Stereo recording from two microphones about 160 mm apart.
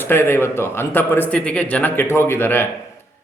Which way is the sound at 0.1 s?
15° left (ahead or behind).